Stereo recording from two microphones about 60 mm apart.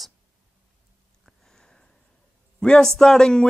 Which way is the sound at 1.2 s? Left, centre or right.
Centre.